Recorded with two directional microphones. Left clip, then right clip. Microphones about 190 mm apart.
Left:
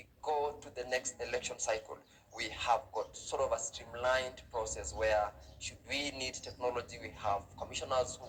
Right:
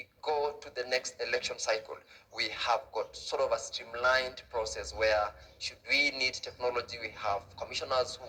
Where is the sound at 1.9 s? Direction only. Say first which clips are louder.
Right 4 dB; 20° right (ahead or behind).